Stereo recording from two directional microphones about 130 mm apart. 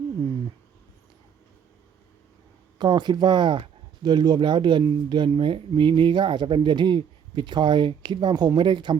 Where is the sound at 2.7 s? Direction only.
35° right (ahead or behind).